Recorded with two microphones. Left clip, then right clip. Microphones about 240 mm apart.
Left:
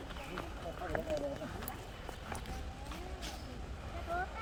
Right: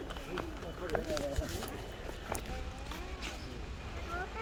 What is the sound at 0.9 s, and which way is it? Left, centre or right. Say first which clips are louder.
Run: right 3 dB; right.